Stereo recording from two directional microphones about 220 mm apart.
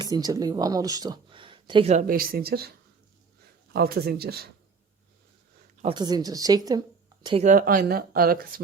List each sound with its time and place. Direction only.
0.0 s speech: 15° right (ahead or behind); by 4.5 s 45° right (ahead or behind)
5.8 s speech: 20° right (ahead or behind)
7.4 s speech: 40° right (ahead or behind)